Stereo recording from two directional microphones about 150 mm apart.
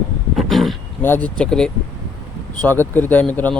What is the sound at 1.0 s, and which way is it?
Speech, 10° left (ahead or behind).